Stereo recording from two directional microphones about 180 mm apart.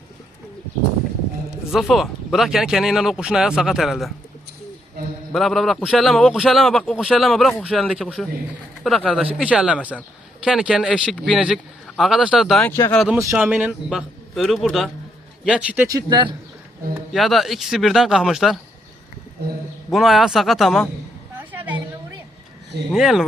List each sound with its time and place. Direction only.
1.7 s a man's voice: centre (ahead or behind)
5.3 s a man's voice: centre (ahead or behind)
12.7 s speech: 15° left (ahead or behind)
13.3 s a man's voice: 5° right (ahead or behind)
15.9 s speech: 20° right (ahead or behind)
17.1 s a man's voice: centre (ahead or behind)
19.9 s a man's voice: centre (ahead or behind)
21.5 s a sound: 10° right (ahead or behind)
22.9 s a man's voice: centre (ahead or behind)